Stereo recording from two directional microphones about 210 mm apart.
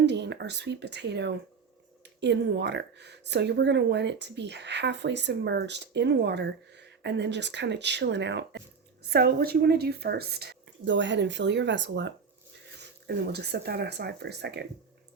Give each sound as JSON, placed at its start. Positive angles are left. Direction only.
{"t": 0.0, "sound": "speech", "side_deg": -55}